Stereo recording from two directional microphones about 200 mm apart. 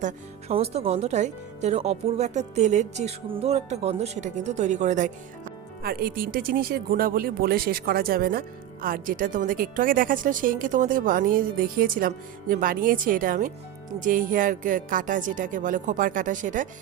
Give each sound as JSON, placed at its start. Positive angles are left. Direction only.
{"t": 0.0, "sound": "speech", "side_deg": -30}
{"t": 5.8, "sound": "speech", "side_deg": -50}